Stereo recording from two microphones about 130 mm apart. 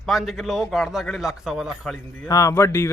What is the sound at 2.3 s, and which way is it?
Speech, 25° left (ahead or behind).